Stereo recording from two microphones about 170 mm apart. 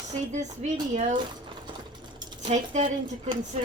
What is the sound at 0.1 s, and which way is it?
Speech, 45° right (ahead or behind).